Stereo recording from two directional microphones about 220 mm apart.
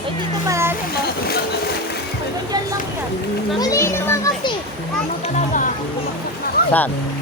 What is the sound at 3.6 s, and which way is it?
Children playing, 15° left (ahead or behind).